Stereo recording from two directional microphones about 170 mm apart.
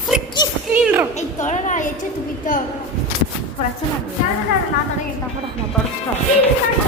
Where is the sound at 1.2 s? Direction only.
45° left (ahead or behind).